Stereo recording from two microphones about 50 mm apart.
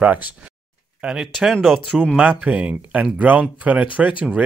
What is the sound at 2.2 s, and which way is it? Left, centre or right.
Speech, right.